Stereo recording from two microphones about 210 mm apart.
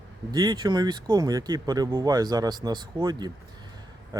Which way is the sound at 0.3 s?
20° right (ahead or behind).